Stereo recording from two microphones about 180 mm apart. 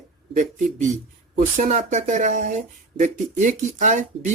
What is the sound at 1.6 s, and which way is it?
Speech, 45° right (ahead or behind).